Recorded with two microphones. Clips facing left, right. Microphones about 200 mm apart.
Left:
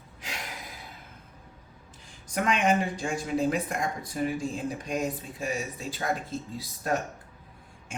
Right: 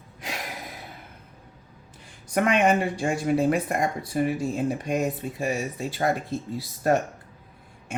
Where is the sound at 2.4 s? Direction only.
60° right (ahead or behind).